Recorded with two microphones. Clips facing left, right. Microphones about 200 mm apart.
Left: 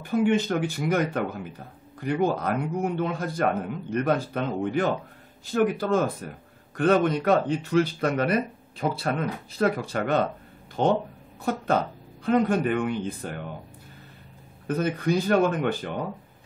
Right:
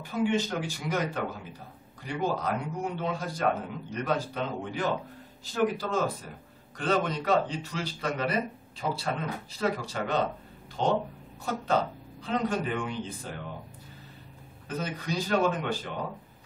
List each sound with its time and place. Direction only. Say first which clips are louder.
0.0 s speech: left 5 dB; 55° left (ahead or behind)
14.7 s speech: left 9 dB; 55° left (ahead or behind)